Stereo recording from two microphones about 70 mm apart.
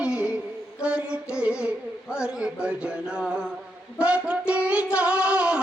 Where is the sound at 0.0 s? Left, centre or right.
Centre.